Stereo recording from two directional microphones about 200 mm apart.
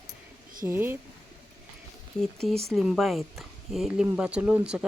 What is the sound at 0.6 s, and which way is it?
Speech, 10° right (ahead or behind).